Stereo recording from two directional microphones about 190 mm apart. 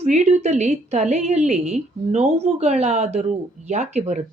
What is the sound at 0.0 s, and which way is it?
A woman's voice, 35° right (ahead or behind).